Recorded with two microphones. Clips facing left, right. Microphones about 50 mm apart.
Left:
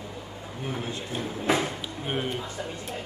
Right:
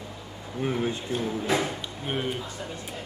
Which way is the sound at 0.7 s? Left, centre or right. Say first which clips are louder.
Right 6 dB; right.